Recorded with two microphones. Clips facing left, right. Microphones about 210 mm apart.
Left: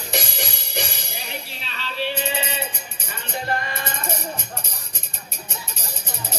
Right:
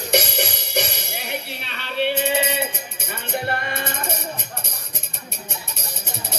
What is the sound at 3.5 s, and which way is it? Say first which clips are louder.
Music: even; 60° right (ahead or behind).